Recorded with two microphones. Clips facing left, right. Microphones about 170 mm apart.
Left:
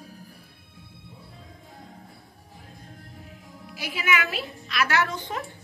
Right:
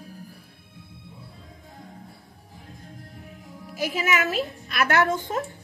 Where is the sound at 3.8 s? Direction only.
45° right (ahead or behind).